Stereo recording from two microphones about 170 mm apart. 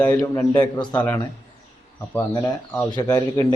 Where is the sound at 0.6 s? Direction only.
25° left (ahead or behind).